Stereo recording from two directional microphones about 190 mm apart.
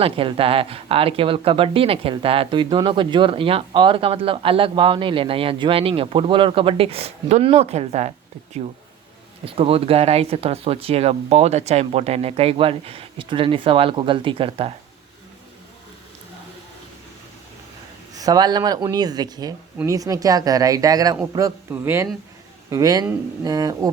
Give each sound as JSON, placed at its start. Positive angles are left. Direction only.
{"t": 0.0, "sound": "speech", "side_deg": -30}
{"t": 9.5, "sound": "speech", "side_deg": -30}
{"t": 18.1, "sound": "speech", "side_deg": -20}